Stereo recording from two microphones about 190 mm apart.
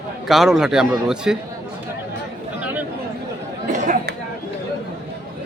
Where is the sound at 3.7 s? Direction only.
45° right (ahead or behind).